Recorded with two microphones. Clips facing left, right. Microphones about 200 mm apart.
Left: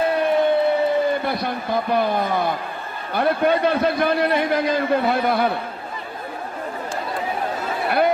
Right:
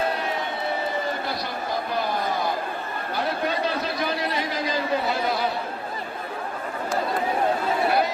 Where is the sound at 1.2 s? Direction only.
55° left (ahead or behind).